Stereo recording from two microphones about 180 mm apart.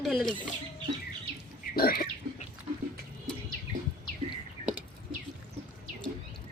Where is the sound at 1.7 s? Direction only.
55° left (ahead or behind).